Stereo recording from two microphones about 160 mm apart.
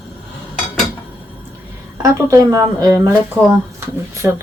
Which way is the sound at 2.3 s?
20° right (ahead or behind).